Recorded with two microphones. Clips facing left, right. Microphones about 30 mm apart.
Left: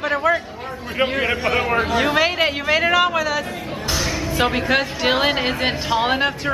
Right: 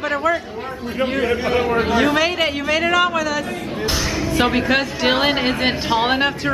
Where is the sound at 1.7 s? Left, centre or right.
Centre.